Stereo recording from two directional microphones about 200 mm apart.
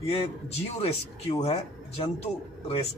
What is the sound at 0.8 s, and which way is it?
Speech, 30° left (ahead or behind).